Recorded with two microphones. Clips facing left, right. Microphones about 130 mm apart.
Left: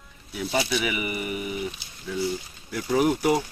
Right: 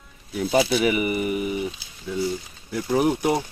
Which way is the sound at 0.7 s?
40° right (ahead or behind).